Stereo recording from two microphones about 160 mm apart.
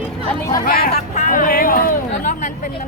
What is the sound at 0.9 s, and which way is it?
Speech, 50° left (ahead or behind).